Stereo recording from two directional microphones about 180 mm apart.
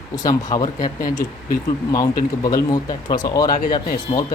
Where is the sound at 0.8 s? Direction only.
50° left (ahead or behind).